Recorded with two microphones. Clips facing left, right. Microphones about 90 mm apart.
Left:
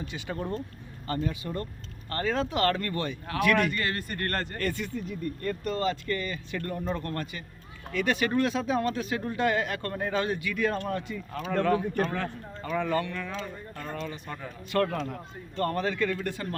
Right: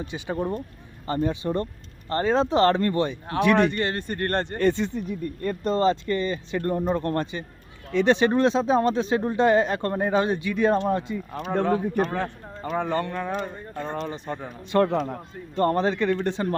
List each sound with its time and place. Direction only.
0.0 s speech: 20° right (ahead or behind)
12.7 s speech: 35° right (ahead or behind)